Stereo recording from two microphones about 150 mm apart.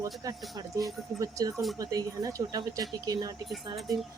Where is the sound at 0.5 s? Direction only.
25° right (ahead or behind).